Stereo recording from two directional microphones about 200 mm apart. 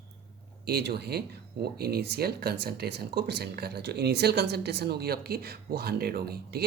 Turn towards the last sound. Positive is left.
turn(degrees=-50)  # may be behind; listen again after turning